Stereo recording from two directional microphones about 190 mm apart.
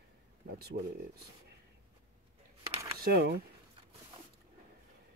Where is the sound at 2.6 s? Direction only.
30° right (ahead or behind).